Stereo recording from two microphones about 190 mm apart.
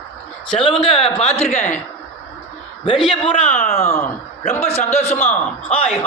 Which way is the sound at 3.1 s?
30° left (ahead or behind).